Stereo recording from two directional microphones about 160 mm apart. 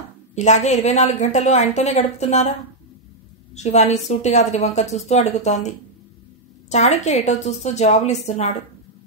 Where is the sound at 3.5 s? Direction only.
45° left (ahead or behind).